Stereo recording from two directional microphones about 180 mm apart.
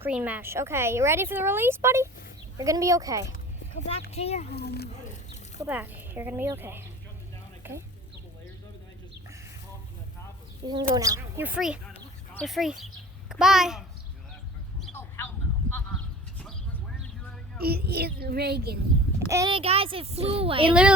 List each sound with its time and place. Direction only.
0.0 s a woman's voice: 10° right (ahead or behind)
3.3 s a sound: 50° left (ahead or behind)
4.1 s a child's voice: 35° left (ahead or behind)
4.5 s speech: 65° left (ahead or behind)
5.5 s a woman's voice: 10° right (ahead or behind)
10.7 s a woman's voice: 20° right (ahead or behind); by 11.9 s 5° right (ahead or behind)
11.9 s a sound: 10° left (ahead or behind)
12.5 s a child's voice: centre (ahead or behind)
14.9 s a sound: 10° left (ahead or behind)
15.7 s sheep: 10° left (ahead or behind)
17.6 s a child's voice: 60° right (ahead or behind)
19.5 s speech: 30° right (ahead or behind)